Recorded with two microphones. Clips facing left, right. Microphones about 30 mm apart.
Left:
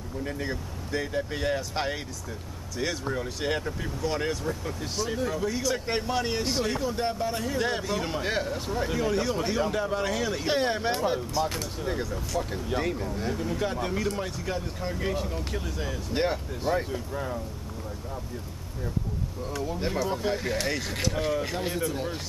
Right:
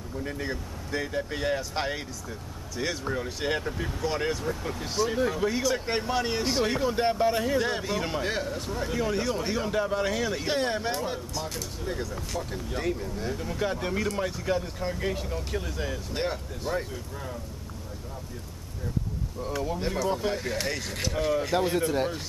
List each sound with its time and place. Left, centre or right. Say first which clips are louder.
0.2 s speech: left 1 dB; centre
5.7 s speech: right 1 dB; centre
6.6 s speech: right 3 dB; centre
7.5 s speech: right 1 dB; centre
8.3 s speech: left 2 dB; centre
16.1 s speech: left 3 dB; centre
19.4 s speech: right 2 dB; centre
19.8 s speech: left 1 dB; centre